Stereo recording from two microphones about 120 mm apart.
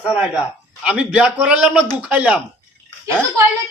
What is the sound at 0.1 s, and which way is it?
A man's voice, 10° right (ahead or behind).